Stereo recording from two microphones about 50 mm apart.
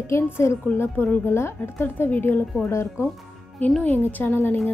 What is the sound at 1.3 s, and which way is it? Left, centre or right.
Speech, left.